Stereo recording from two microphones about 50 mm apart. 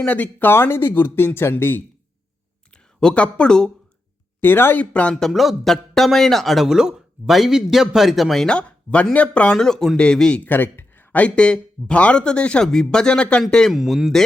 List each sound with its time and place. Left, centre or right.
0.0 s speech: left
0.5 s speech: left
3.0 s speech: centre
4.4 s speech: left
4.8 s speech: left
5.3 s a man's voice: centre
6.7 s a man's voice: centre
8.4 s speech: left
9.6 s speech: centre
10.4 s speech: left
11.1 s speech: left
13.7 s a man's voice: centre